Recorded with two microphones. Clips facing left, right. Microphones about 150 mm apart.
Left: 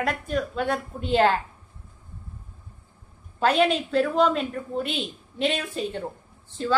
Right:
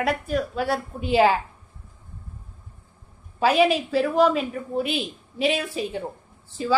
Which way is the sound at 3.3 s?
5° right (ahead or behind).